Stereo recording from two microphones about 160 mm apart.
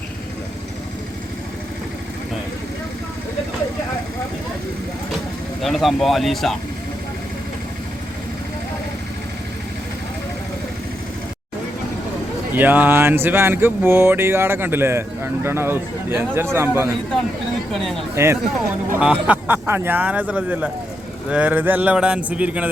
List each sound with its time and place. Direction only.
5.6 s speech: centre (ahead or behind)
12.5 s speech: 10° right (ahead or behind)
17.7 s speech: centre (ahead or behind)
18.1 s speech: 15° right (ahead or behind)